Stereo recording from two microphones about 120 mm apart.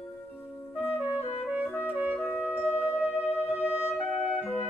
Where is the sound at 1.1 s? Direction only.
60° left (ahead or behind).